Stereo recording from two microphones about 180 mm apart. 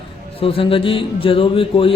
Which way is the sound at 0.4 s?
30° left (ahead or behind).